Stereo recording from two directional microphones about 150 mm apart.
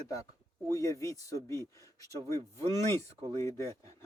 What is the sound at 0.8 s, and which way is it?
Speech, 20° left (ahead or behind).